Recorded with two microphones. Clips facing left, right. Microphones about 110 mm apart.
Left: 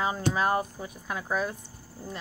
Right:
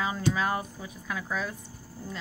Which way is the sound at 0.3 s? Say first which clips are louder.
Left 3 dB; 35° left (ahead or behind).